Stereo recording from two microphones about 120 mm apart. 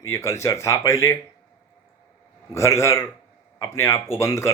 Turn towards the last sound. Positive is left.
turn(degrees=25)  # may be behind; listen again after turning